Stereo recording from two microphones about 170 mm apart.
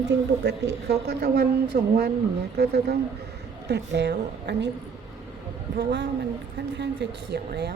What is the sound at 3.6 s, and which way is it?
A woman's voice, 85° right.